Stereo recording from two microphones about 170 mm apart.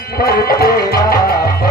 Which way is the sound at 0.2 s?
60° left (ahead or behind).